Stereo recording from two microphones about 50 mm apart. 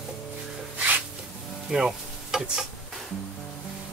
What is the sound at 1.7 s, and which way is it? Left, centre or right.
Stir, centre.